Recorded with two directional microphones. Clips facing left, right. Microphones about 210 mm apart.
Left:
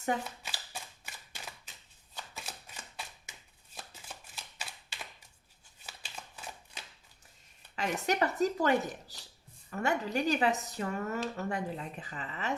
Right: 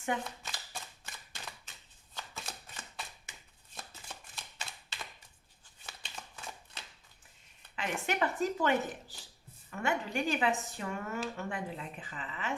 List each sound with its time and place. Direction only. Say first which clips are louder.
0.3 s a sound: even; 5° left (ahead or behind)
3.8 s shuffling cards: even; 5° left (ahead or behind)
7.8 s speech: left 3 dB; 40° left (ahead or behind)